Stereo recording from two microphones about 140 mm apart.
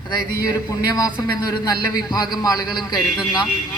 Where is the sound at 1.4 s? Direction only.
25° left (ahead or behind).